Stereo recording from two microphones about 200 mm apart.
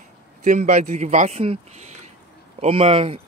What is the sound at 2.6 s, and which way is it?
Speech, 30° right (ahead or behind).